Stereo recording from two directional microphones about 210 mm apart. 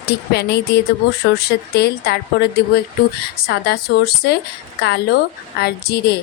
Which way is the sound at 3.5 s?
50° left (ahead or behind).